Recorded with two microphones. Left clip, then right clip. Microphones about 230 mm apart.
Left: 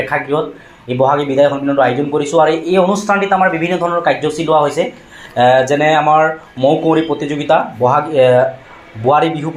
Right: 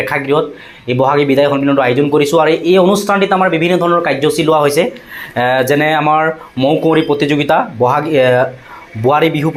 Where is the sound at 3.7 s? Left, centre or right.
Right.